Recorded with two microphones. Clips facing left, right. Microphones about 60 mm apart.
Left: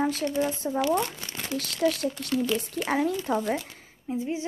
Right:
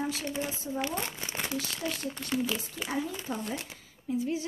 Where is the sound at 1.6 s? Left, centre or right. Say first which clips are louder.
Left 9 dB; left.